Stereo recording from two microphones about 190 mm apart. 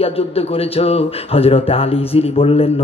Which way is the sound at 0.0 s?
30° left (ahead or behind).